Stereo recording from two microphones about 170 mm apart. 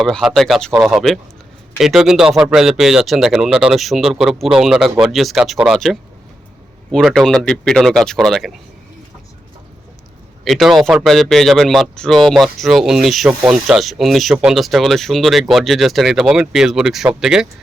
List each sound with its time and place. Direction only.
0.0 s speech: centre (ahead or behind)
10.4 s speech: centre (ahead or behind)